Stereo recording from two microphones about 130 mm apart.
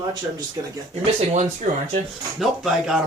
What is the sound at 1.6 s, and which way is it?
Speech, 75° right (ahead or behind).